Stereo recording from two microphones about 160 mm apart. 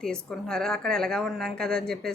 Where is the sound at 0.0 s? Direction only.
5° left (ahead or behind).